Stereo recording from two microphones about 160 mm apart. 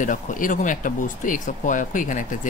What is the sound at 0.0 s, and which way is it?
Speech, 55° left (ahead or behind).